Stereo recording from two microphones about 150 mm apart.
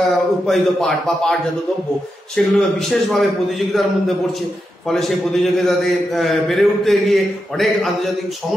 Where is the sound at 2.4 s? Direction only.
5° left (ahead or behind).